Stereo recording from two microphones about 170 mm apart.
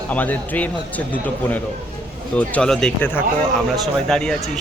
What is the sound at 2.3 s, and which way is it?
Speech, 5° left (ahead or behind).